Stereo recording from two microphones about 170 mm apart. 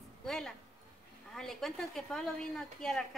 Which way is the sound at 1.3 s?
5° left (ahead or behind).